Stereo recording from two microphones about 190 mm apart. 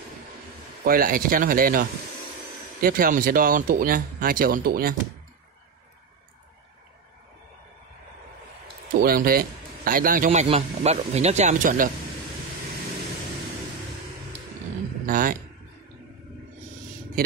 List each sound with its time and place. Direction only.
0.8 s speech: 50° right (ahead or behind)
8.9 s a man's voice: 50° right (ahead or behind)
10.5 s speech: 35° right (ahead or behind)
15.0 s speech: 45° right (ahead or behind)